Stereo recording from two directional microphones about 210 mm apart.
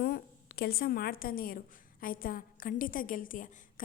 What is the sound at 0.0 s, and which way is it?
A woman's voice, 50° left (ahead or behind).